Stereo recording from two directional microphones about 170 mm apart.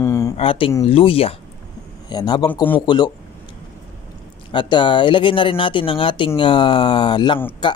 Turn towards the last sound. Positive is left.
turn(degrees=30)  # may be behind; listen again after turning